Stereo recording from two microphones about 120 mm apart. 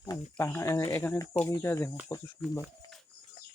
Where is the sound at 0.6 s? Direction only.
25° left (ahead or behind).